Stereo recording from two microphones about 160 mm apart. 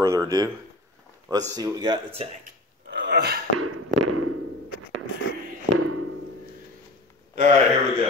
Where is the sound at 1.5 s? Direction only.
25° right (ahead or behind).